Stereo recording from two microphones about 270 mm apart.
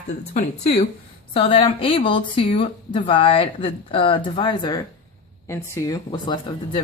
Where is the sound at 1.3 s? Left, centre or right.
Left.